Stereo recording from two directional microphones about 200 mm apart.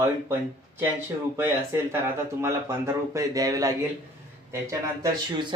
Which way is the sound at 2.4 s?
15° right (ahead or behind).